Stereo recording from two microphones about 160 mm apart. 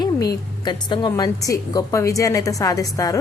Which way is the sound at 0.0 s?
25° left (ahead or behind).